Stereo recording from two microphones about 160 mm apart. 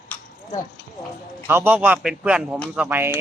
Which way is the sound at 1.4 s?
10° right (ahead or behind).